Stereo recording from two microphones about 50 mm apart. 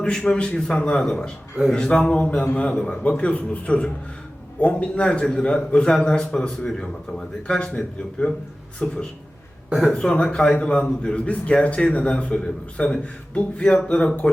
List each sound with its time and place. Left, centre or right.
0.0 s a man's voice: centre